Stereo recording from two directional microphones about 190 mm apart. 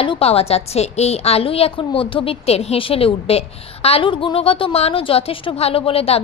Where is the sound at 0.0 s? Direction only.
30° left (ahead or behind).